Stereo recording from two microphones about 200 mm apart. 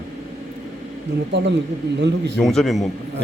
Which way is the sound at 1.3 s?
60° right (ahead or behind).